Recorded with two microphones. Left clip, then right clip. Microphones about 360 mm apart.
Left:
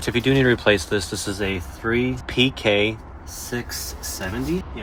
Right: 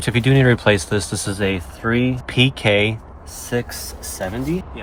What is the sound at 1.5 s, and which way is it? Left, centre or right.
Speech, right.